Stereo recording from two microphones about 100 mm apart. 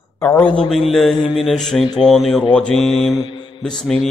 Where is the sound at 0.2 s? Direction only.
25° left (ahead or behind).